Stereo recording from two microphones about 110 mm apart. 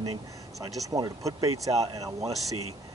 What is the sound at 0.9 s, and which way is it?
Speech, 30° right (ahead or behind).